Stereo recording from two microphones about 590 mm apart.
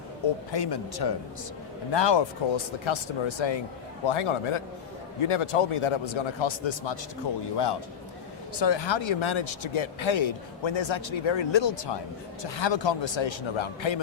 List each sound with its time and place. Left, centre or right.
0.5 s speech: left
8.5 s speech: left